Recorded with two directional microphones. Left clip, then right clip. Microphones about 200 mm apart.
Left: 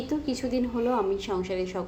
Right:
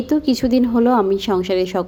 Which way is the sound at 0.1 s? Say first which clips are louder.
Right 13 dB; 40° right (ahead or behind).